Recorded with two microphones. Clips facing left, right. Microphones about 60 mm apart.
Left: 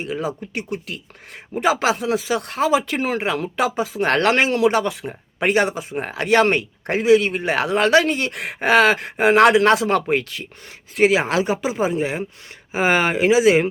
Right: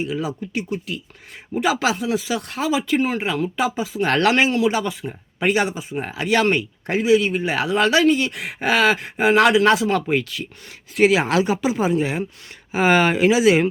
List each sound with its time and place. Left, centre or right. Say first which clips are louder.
0.0 s speech: even; left
10.9 s speech: even; left